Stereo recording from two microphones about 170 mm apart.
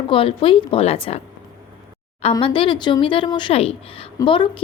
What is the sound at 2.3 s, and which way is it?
Speech, 30° left (ahead or behind).